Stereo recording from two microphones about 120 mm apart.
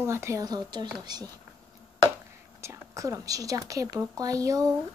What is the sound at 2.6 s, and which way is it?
Speech, 25° right (ahead or behind).